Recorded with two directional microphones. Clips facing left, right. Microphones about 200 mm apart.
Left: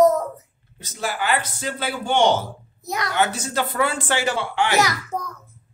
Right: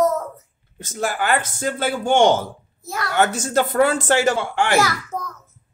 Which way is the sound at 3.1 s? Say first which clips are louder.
Right 5 dB; 45° right (ahead or behind).